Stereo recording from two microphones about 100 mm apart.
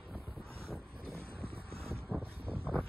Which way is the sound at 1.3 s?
70° right (ahead or behind).